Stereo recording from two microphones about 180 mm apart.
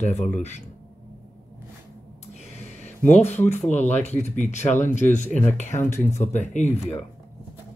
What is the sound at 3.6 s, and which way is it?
Speech, 40° left (ahead or behind).